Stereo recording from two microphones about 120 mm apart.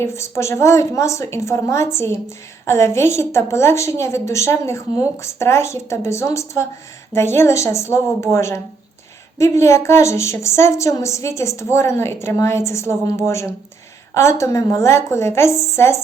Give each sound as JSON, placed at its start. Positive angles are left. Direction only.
{"t": 0.0, "sound": "a woman's voice", "side_deg": 25}